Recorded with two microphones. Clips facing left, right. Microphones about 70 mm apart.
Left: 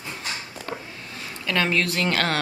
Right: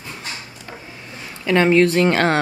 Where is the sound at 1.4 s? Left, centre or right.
Right.